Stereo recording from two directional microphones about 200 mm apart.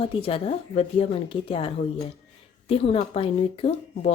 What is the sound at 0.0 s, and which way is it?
Speech, 25° left (ahead or behind).